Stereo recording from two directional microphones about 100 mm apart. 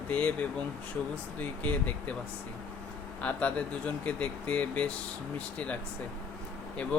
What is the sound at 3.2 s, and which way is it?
Speech, 15° left (ahead or behind).